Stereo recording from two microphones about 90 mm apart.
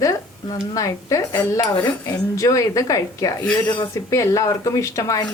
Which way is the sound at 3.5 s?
55° left (ahead or behind).